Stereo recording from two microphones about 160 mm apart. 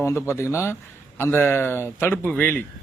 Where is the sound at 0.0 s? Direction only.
15° left (ahead or behind).